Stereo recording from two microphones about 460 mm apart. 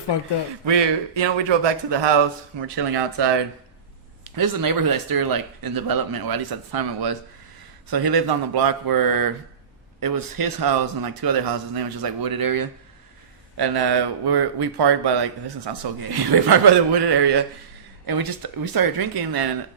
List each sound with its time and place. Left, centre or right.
0.6 s speech: right
3.2 s speech: right
4.2 s speech: right